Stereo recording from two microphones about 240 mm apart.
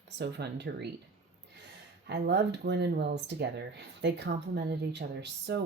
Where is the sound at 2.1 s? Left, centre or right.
Right.